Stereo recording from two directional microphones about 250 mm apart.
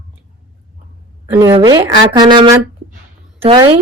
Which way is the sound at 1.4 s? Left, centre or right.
Centre.